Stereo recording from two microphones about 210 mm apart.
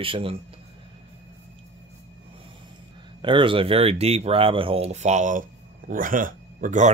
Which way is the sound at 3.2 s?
25° right (ahead or behind).